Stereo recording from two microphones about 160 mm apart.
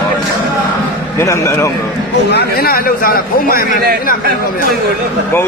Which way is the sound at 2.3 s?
80° left.